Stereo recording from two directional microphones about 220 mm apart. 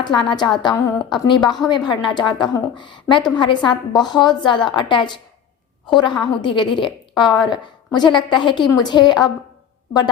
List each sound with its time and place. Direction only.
0.0 s a woman's voice: 20° left (ahead or behind)